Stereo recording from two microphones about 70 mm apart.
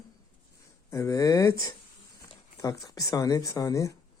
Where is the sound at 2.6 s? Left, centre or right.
Left.